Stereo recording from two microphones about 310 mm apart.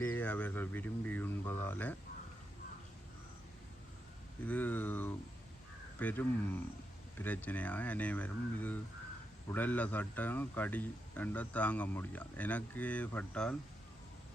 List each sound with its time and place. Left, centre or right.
0.0 s speech: centre
4.4 s speech: centre